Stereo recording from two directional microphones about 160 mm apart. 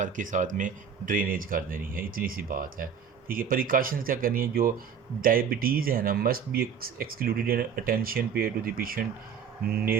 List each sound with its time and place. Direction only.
0.0 s speech: 55° right (ahead or behind)